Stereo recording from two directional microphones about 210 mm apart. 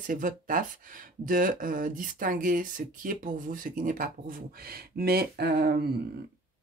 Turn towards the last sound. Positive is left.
turn(degrees=-50)  # may be behind; listen again after turning